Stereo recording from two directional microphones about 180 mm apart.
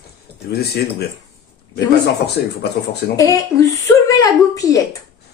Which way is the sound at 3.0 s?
65° left (ahead or behind).